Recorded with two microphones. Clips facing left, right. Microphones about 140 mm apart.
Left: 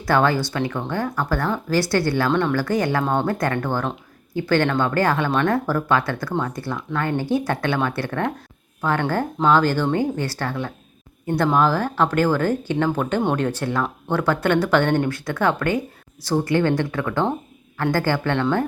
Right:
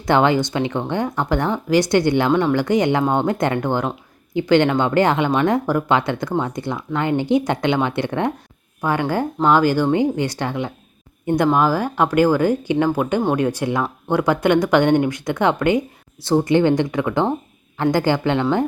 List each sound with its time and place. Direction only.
0.0 s speech: 20° right (ahead or behind)